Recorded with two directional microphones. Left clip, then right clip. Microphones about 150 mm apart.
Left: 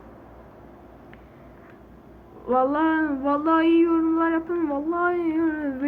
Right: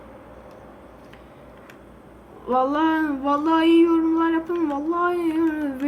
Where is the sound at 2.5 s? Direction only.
5° right (ahead or behind).